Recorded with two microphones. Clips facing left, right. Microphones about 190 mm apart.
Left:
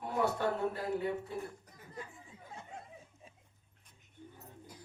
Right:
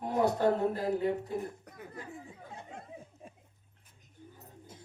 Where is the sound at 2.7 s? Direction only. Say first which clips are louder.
Right 4 dB; 55° right (ahead or behind).